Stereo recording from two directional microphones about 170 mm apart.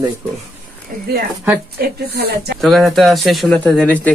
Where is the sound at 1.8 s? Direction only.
70° right (ahead or behind).